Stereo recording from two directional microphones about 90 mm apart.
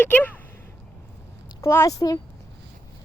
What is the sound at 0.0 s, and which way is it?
Speech, 20° left (ahead or behind).